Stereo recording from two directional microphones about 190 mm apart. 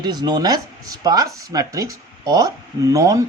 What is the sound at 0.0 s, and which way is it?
A woman's voice, 20° right (ahead or behind).